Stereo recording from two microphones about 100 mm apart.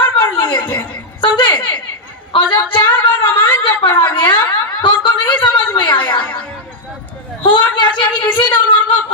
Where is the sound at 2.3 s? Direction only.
65° left (ahead or behind).